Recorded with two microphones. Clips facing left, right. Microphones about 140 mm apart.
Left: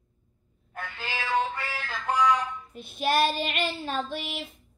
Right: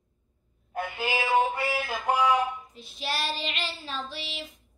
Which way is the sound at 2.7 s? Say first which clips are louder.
Left 7 dB; 55° left (ahead or behind).